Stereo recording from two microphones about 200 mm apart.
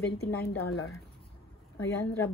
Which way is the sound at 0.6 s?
90° left.